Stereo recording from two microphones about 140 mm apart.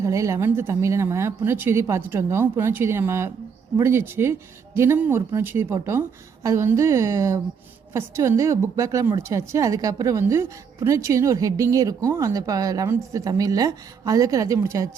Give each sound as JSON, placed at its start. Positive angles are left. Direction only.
{"t": 0.0, "sound": "a woman's voice", "side_deg": -20}